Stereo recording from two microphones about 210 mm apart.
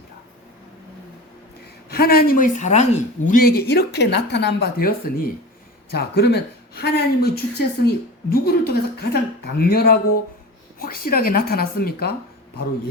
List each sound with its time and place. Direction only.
1.9 s speech: 45° left (ahead or behind)